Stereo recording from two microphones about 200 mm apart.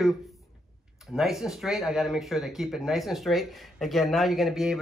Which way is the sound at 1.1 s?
Centre (ahead or behind).